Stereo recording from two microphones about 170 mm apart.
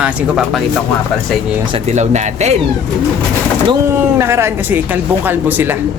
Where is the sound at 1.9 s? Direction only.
45° right (ahead or behind).